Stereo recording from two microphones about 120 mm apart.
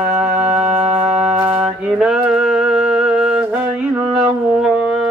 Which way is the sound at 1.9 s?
5° right (ahead or behind).